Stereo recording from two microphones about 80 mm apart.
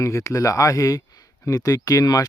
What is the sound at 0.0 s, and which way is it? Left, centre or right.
Speech, left.